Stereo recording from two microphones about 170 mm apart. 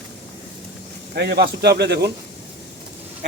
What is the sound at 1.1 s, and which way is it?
Speech, 80° right.